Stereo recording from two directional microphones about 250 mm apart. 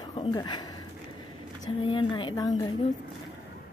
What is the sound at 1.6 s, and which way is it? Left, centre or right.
Speech, centre.